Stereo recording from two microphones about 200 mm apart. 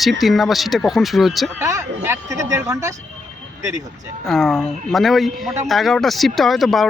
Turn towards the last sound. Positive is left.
turn(degrees=0)  # may be behind; listen again after turning